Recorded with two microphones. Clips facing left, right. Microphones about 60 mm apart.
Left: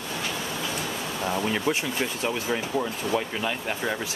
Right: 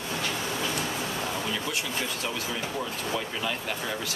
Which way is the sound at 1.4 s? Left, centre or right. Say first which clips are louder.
Left 6 dB; left.